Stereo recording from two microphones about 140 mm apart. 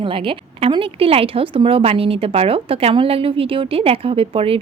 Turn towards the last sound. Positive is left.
turn(degrees=-45)  # may be behind; listen again after turning